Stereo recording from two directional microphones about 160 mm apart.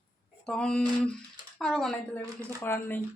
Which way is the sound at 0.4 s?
5° left (ahead or behind).